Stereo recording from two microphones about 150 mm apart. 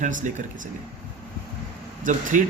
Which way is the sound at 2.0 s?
60° right (ahead or behind).